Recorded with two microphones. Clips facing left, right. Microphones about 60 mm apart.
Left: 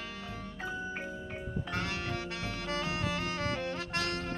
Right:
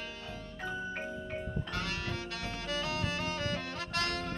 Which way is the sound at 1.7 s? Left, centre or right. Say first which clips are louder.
Left 3 dB; left.